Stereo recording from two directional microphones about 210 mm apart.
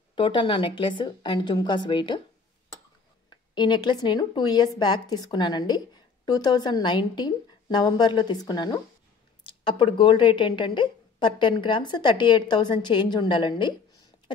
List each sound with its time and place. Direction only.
0.1 s speech: 25° left (ahead or behind)
3.3 s speech: 20° left (ahead or behind)